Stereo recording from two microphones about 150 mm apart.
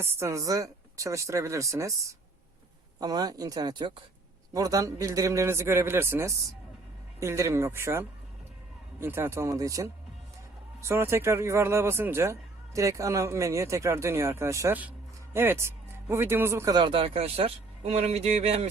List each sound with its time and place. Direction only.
0.0 s speech: 15° right (ahead or behind)
16.7 s a man's voice: 35° right (ahead or behind)